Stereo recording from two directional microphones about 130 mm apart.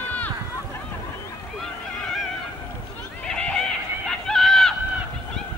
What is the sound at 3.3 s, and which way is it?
Neigh, 5° left (ahead or behind).